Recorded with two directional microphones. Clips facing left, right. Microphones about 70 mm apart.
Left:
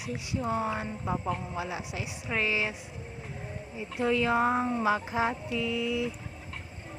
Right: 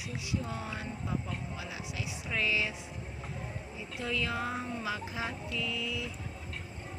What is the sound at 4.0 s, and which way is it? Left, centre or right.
Speech, left.